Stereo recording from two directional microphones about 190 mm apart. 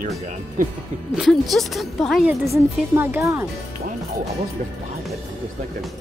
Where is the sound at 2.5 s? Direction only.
15° right (ahead or behind).